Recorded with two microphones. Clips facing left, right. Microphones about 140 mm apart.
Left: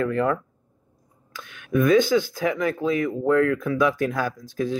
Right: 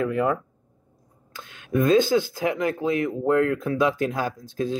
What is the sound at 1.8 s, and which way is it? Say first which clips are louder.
Speech: left 1 dB; 15° right (ahead or behind).